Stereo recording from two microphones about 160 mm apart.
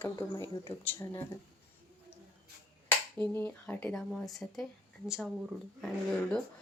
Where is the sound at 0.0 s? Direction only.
20° left (ahead or behind).